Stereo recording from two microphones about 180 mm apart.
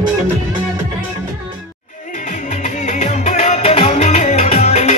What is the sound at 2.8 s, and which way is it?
Music, 40° left (ahead or behind).